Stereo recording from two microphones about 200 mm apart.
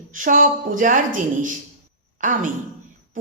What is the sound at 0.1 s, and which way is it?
A woman's voice, 40° right (ahead or behind).